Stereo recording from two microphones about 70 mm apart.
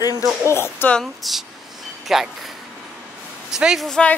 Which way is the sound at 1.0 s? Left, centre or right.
Centre.